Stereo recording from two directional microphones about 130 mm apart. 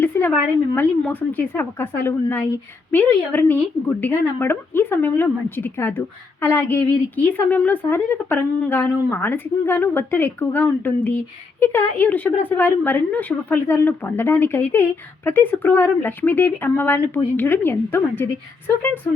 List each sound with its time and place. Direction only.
0.0 s a woman's voice: 15° left (ahead or behind)